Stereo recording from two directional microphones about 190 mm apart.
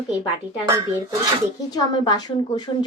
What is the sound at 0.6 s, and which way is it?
Speech, 15° right (ahead or behind).